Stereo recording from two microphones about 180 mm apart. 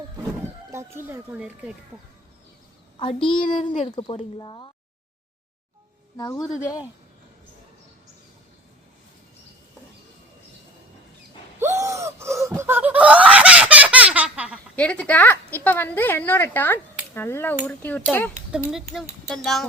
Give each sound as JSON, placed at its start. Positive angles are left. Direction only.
{"t": 0.7, "sound": "speech", "side_deg": -15}
{"t": 3.0, "sound": "speech", "side_deg": 30}
{"t": 6.1, "sound": "speech", "side_deg": 20}
{"t": 11.6, "sound": "gasp", "side_deg": -15}
{"t": 14.8, "sound": "a woman's voice", "side_deg": 5}
{"t": 18.5, "sound": "speech", "side_deg": 0}